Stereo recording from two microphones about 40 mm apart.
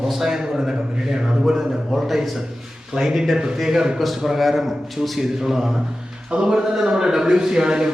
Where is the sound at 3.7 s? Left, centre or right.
Centre.